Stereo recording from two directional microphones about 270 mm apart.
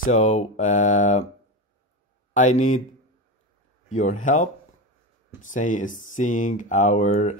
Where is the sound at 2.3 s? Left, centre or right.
Left.